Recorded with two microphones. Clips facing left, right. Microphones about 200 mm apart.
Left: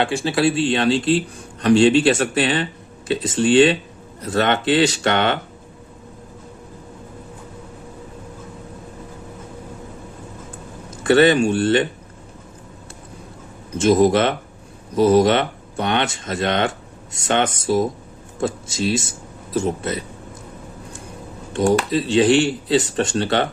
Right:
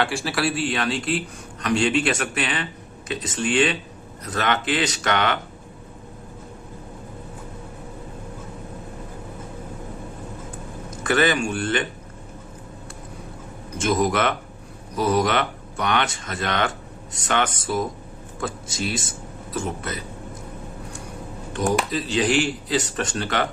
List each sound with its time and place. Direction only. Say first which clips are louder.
0.0 s speech: left 5 dB; 20° left (ahead or behind)
11.0 s speech: left 7 dB; 30° left (ahead or behind)
13.8 s speech: left 6 dB; 25° left (ahead or behind)
21.5 s speech: left 5 dB; 25° left (ahead or behind)